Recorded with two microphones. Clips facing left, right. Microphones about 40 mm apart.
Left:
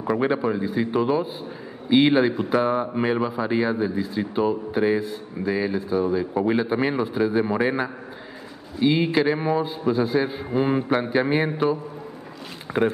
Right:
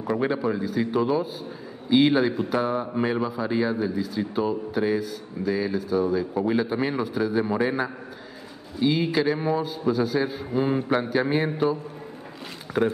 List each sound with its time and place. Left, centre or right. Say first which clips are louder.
0.2 s a man's voice: left 2 dB; centre